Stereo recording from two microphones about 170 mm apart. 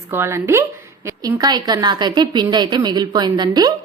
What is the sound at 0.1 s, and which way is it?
A woman's voice, 15° right (ahead or behind).